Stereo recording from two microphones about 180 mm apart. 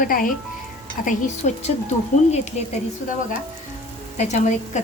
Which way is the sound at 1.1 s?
40° left (ahead or behind).